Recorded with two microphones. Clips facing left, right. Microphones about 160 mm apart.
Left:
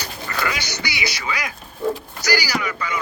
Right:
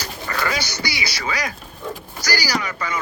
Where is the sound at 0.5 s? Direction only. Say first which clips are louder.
Right 3 dB; 40° right (ahead or behind).